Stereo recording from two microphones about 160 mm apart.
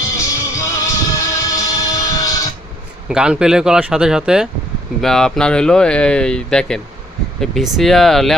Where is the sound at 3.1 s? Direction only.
5° right (ahead or behind).